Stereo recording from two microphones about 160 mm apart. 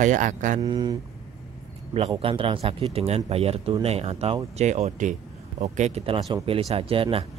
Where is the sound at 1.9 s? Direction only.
35° right (ahead or behind).